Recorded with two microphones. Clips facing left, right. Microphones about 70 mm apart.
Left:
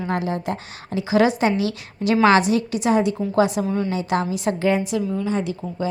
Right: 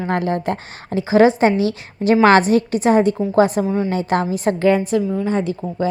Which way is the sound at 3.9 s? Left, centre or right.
Right.